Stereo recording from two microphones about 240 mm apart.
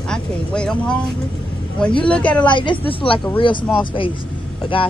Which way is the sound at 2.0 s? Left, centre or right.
Centre.